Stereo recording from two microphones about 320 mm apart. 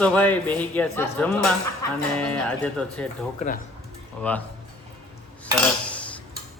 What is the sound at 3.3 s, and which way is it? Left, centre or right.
Speech, left.